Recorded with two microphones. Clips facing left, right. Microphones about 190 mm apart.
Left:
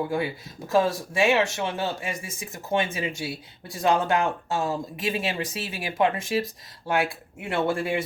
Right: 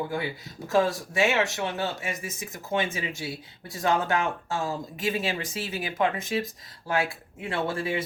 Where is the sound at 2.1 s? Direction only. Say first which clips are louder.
Even; 25° left (ahead or behind).